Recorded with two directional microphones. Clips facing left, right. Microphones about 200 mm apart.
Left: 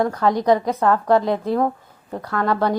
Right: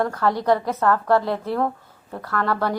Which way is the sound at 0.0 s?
15° left (ahead or behind).